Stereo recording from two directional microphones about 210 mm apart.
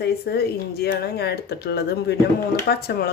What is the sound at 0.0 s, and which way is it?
Speech, 50° left (ahead or behind).